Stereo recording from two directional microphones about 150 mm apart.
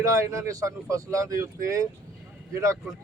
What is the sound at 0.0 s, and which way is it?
Speech, 20° right (ahead or behind).